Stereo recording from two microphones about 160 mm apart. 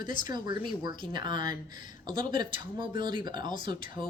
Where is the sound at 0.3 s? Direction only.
30° right (ahead or behind).